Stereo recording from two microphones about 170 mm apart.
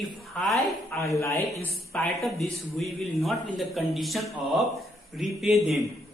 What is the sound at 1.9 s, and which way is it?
A man's voice, centre (ahead or behind).